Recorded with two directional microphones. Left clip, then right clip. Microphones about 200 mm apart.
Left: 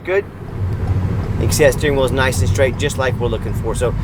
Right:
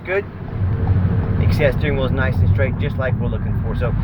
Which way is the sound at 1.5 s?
35° left (ahead or behind).